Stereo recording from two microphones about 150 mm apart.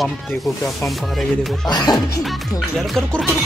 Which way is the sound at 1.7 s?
30° left (ahead or behind).